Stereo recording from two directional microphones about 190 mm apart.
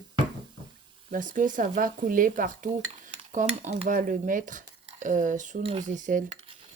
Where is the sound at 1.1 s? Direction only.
45° right (ahead or behind).